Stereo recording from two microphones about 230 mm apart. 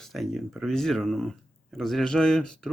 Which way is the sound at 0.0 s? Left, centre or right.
Centre.